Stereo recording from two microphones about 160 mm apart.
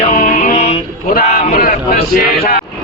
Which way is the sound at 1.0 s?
60° left (ahead or behind).